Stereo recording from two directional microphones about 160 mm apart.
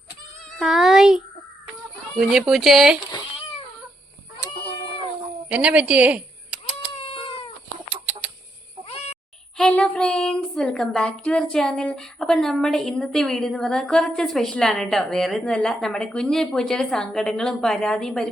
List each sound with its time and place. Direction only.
0.5 s speech: centre (ahead or behind)
5.5 s speech: 5° right (ahead or behind)
5.9 s a sound: 10° right (ahead or behind)
7.0 s cat: 35° left (ahead or behind)
7.9 s chicken: 5° right (ahead or behind)
9.6 s speech: 5° left (ahead or behind)